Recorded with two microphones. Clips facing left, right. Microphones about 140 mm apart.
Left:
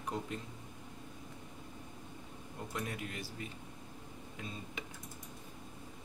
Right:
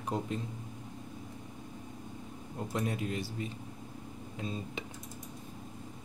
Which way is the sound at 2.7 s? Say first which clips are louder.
Right 7 dB; 30° right (ahead or behind).